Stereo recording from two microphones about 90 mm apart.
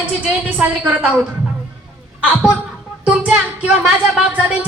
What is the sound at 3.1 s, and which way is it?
A woman's voice, 15° right (ahead or behind).